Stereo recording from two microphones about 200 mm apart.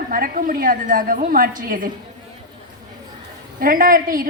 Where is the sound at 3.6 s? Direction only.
45° right (ahead or behind).